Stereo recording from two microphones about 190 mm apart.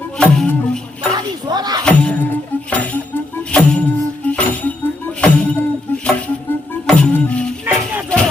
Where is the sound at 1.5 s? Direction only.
20° right (ahead or behind).